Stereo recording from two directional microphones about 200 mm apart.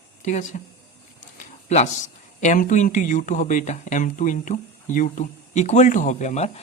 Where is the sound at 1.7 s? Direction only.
35° left (ahead or behind).